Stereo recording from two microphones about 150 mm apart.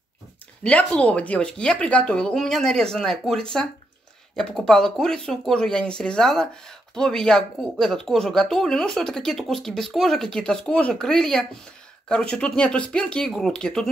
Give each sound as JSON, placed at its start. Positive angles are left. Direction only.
{"t": 0.7, "sound": "speech", "side_deg": 10}